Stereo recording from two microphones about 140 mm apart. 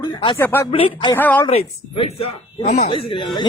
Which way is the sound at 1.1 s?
10° left (ahead or behind).